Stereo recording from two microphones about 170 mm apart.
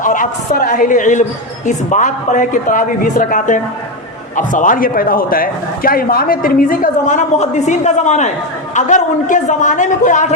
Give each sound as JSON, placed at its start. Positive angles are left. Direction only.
{"t": 0.0, "sound": "a woman's voice", "side_deg": 50}